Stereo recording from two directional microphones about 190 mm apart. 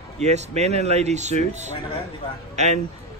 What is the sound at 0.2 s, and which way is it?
A man's voice, 35° right (ahead or behind).